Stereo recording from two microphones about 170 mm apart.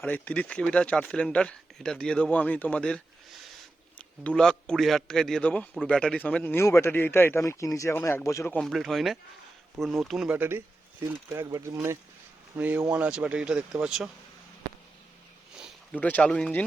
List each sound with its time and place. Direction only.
0.0 s a man's voice: 5° left (ahead or behind)
8.6 s speech: centre (ahead or behind)
10.3 s speech: 10° right (ahead or behind)
15.5 s a sound: 5° right (ahead or behind)
16.0 s a man's voice: 10° left (ahead or behind)